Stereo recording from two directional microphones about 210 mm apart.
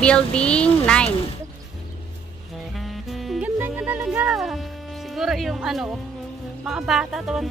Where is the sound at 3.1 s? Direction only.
Centre (ahead or behind).